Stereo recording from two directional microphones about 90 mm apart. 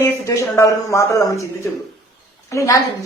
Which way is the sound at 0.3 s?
35° left (ahead or behind).